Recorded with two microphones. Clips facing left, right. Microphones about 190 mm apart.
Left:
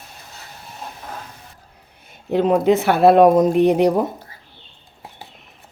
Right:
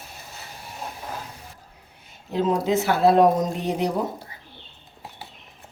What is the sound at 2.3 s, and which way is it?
Speech, 65° left (ahead or behind).